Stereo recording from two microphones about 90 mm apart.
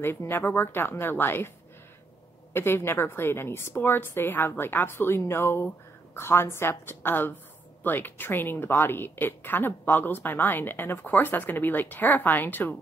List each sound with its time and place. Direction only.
0.0 s a woman's voice: 25° left (ahead or behind)
2.5 s a woman's voice: 25° left (ahead or behind)